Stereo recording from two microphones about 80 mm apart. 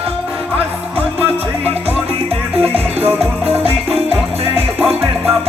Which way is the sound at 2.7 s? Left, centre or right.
Right.